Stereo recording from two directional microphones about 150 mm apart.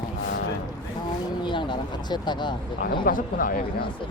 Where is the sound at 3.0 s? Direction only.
65° left (ahead or behind).